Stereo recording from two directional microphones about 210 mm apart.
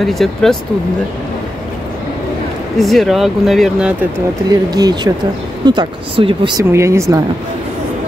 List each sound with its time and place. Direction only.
0.0 s speech: centre (ahead or behind)
2.8 s speech: centre (ahead or behind)
4.5 s speech: 20° right (ahead or behind)
6.6 s speech: 15° right (ahead or behind)